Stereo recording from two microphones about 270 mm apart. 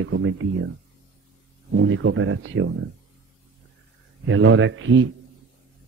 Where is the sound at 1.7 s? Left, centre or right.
Right.